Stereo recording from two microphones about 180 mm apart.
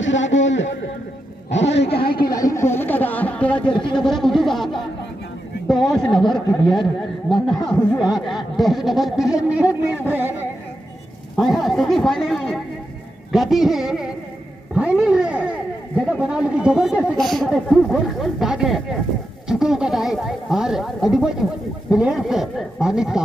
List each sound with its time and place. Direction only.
0.0 s a man's voice: 90° left
1.5 s a woman's voice: 80° left; by 2.2 s 60° left (ahead or behind)
2.2 s a sound: 20° left (ahead or behind); by 4.8 s centre (ahead or behind)
5.7 s a man's voice: centre (ahead or behind)
11.3 s speech: centre (ahead or behind)